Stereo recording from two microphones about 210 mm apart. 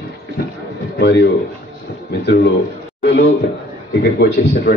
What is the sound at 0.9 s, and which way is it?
A man's voice, 50° left (ahead or behind).